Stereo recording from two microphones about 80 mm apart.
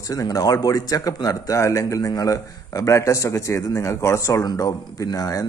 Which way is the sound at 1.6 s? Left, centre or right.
Left.